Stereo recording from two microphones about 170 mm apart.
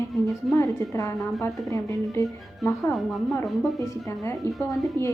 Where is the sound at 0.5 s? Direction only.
15° left (ahead or behind).